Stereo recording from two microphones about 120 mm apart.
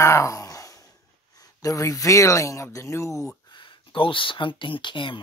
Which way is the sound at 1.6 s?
30° left (ahead or behind).